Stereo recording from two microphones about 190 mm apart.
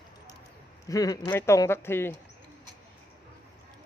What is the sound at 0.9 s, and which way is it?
Speech, 20° left (ahead or behind).